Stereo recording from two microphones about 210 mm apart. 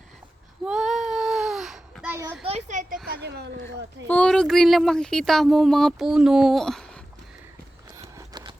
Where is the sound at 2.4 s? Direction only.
30° right (ahead or behind).